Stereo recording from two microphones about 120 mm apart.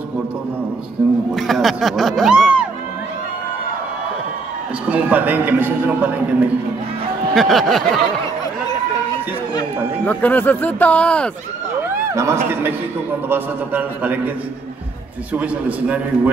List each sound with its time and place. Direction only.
1.3 s speech: centre (ahead or behind)
4.9 s a man's voice: 15° right (ahead or behind)
7.3 s speech: centre (ahead or behind)
10.0 s speech: 15° left (ahead or behind)
12.1 s a man's voice: 25° right (ahead or behind)
15.3 s a man's voice: 10° right (ahead or behind)